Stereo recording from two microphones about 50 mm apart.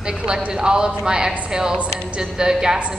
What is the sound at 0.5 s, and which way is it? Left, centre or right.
A woman's voice, centre.